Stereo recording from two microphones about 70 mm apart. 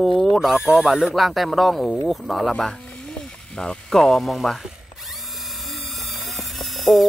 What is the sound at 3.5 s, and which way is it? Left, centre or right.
Speech, centre.